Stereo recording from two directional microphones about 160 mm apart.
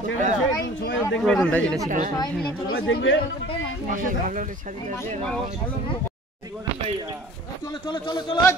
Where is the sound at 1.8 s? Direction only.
55° right (ahead or behind).